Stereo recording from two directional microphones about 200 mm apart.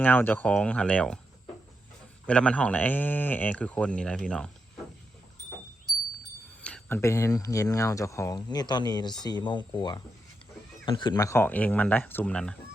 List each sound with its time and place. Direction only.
0.0 s speech: 10° left (ahead or behind)
2.2 s speech: 5° left (ahead or behind)
6.6 s speech: 5° left (ahead or behind)